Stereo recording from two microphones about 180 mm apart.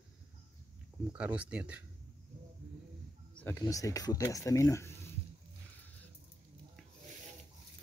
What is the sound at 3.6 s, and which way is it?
Speech, 20° left (ahead or behind).